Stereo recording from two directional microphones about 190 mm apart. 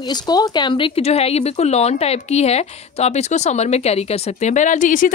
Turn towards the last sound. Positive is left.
turn(degrees=45)  # may be behind; listen again after turning